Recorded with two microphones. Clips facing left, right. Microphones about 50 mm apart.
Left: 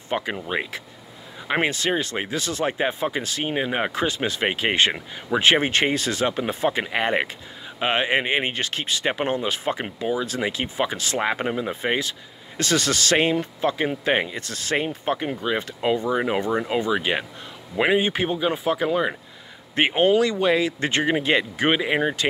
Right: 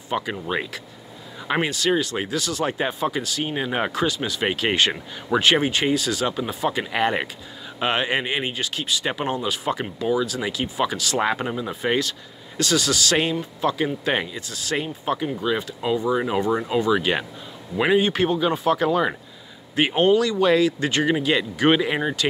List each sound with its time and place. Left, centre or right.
0.1 s speech: left
1.6 s speech: left
3.4 s speech: left
3.9 s speech: left
4.5 s speech: left
5.7 s speech: left
6.9 s speech: left
12.5 s speech: left
14.3 s speech: left; by 19.1 s centre
19.7 s speech: left
21.6 s speech: centre